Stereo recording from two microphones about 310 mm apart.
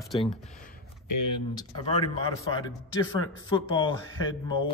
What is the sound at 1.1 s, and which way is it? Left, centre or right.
Speech, left.